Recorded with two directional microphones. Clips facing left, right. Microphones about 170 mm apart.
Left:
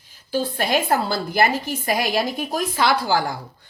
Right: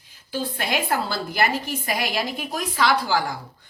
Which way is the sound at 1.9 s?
35° left (ahead or behind).